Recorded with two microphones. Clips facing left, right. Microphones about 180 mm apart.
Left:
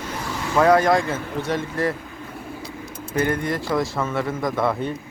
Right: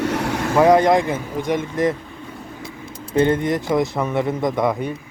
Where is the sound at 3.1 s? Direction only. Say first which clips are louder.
Right 5 dB; 25° right (ahead or behind).